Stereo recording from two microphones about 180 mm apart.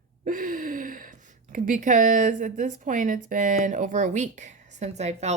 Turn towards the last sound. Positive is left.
turn(degrees=-40)  # may be behind; listen again after turning